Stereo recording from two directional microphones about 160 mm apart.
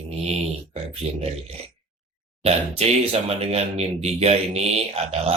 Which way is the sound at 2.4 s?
40° right (ahead or behind).